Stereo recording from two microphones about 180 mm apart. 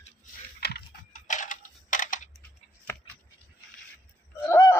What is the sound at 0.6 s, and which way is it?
Computer keyboard, 60° left (ahead or behind).